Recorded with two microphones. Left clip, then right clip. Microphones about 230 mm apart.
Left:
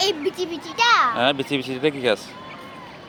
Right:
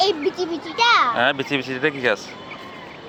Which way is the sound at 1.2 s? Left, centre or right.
Centre.